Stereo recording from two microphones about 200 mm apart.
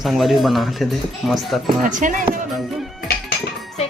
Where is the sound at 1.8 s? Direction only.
40° right (ahead or behind).